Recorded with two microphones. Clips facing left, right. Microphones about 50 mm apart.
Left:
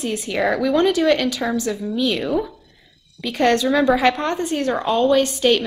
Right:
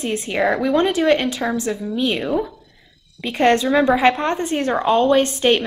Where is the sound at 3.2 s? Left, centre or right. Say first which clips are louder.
Right 1 dB; right.